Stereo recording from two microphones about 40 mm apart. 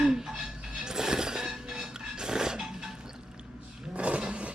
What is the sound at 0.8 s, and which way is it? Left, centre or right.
Music, centre.